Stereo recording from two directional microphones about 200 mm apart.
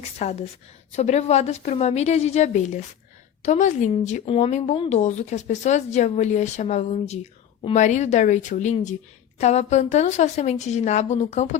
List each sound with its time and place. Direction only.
0.0 s speech: 35° left (ahead or behind)